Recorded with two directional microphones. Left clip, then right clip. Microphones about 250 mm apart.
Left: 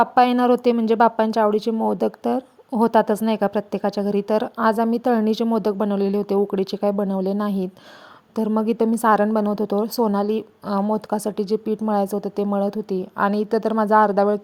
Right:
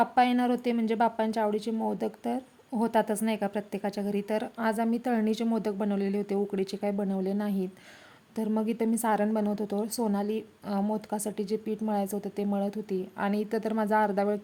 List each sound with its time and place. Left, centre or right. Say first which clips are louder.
0.0 s a woman's voice: left 8 dB; left